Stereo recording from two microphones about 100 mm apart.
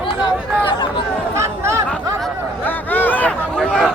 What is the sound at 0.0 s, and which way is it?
Chatter, 50° left (ahead or behind).